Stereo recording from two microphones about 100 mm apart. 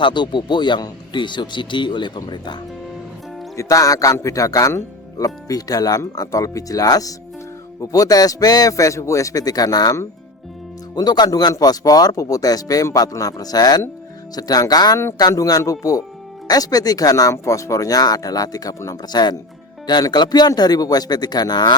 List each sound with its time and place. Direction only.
0.0 s a man's voice: 50° left (ahead or behind)
3.6 s a man's voice: 35° left (ahead or behind)